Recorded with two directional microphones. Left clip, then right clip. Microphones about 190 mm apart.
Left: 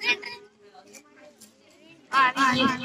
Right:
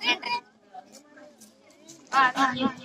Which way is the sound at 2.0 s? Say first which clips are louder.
Left 1 dB; 40° left (ahead or behind).